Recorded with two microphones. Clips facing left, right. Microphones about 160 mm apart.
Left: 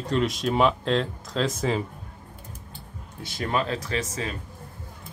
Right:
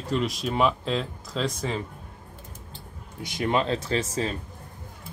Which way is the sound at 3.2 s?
20° right (ahead or behind).